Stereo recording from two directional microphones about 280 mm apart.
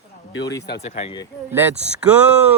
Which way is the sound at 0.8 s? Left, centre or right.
Left.